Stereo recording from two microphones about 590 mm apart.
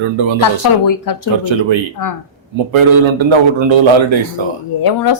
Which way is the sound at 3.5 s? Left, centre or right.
Right.